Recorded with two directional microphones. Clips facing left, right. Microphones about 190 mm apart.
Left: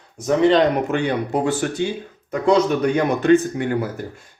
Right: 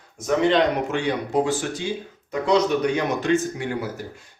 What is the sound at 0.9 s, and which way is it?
A man's voice, 60° left (ahead or behind).